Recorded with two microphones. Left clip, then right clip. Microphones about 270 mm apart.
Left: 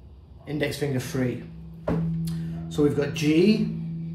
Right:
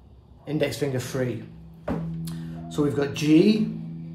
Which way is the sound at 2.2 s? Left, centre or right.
Centre.